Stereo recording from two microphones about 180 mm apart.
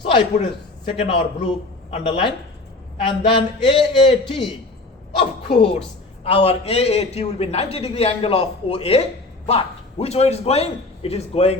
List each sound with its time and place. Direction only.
0.0 s a man's voice: 30° left (ahead or behind)
5.5 s a man's voice: 30° left (ahead or behind)